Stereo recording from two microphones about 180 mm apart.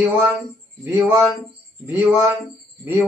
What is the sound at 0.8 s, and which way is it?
Music, 15° right (ahead or behind).